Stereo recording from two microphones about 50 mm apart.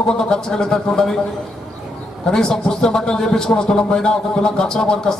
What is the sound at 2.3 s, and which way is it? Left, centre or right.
A man's voice, centre.